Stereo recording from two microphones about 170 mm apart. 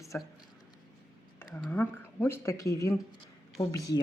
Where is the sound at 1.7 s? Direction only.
10° left (ahead or behind).